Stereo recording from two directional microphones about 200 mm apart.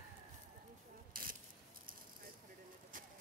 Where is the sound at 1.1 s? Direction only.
45° right (ahead or behind).